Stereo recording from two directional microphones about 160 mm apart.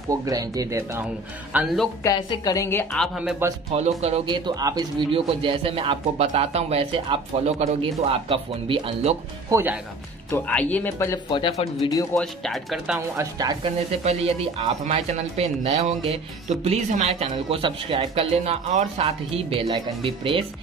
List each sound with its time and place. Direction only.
0.1 s speech: 20° right (ahead or behind)
2.0 s a woman's voice: 20° left (ahead or behind)
3.2 s speech: 5° right (ahead or behind)
3.7 s speech: 40° right (ahead or behind)
9.5 s speech: 15° right (ahead or behind)
10.3 s speech: 10° left (ahead or behind)
11.2 s a woman's voice: 30° left (ahead or behind)
12.2 s speech: centre (ahead or behind)
12.9 s speech: 15° right (ahead or behind); by 20.4 s 35° right (ahead or behind)